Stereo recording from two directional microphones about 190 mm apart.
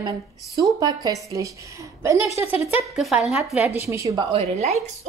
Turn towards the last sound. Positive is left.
turn(degrees=-35)  # may be behind; listen again after turning